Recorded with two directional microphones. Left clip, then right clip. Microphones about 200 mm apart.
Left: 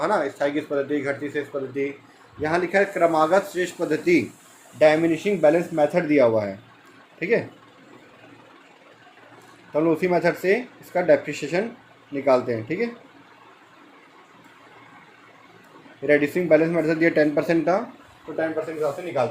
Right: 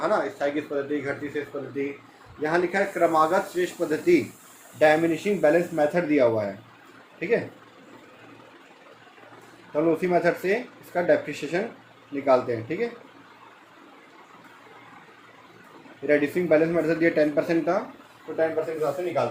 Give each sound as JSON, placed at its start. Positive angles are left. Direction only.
{"t": 0.0, "sound": "speech", "side_deg": 55}
{"t": 4.8, "sound": "speech", "side_deg": 35}
{"t": 9.7, "sound": "speech", "side_deg": 40}
{"t": 16.0, "sound": "speech", "side_deg": 40}